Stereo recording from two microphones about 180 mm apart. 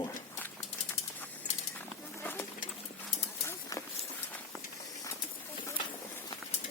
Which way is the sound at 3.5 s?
20° left (ahead or behind).